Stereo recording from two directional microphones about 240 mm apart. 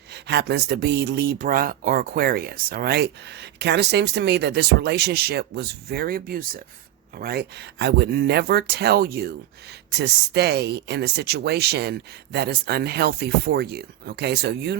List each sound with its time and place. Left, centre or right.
0.1 s speech: right